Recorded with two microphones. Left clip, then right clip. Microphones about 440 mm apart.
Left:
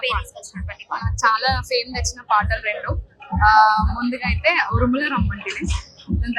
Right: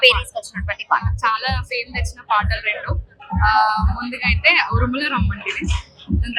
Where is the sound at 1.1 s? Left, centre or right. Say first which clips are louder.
Left 2 dB; left.